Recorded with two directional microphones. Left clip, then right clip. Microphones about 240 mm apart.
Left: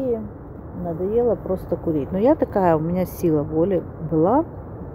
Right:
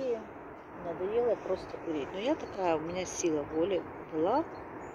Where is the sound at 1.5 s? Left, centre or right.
Left.